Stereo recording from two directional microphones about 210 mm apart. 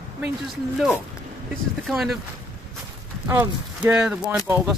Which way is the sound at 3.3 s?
10° right (ahead or behind).